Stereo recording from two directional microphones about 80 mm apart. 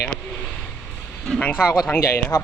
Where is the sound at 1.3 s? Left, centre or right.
Centre.